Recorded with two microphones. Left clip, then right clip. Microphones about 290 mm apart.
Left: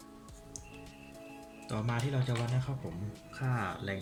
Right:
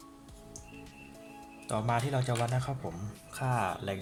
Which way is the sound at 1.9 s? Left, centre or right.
Right.